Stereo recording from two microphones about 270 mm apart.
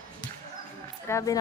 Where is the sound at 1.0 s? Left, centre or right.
Centre.